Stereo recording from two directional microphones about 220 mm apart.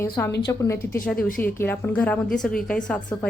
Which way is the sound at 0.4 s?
15° left (ahead or behind).